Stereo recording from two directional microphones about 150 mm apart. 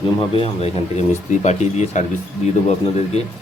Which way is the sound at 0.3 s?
45° left (ahead or behind).